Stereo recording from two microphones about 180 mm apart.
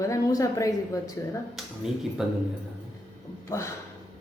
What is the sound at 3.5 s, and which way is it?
Speech, 20° left (ahead or behind).